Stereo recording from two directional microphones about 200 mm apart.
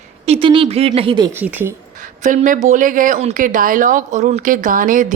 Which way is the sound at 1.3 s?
10° right (ahead or behind).